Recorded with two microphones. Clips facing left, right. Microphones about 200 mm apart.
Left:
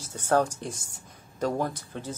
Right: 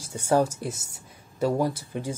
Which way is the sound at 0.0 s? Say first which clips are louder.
Right 2 dB; 10° right (ahead or behind).